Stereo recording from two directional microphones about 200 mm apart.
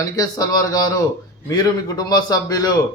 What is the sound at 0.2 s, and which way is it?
Speech, 15° left (ahead or behind).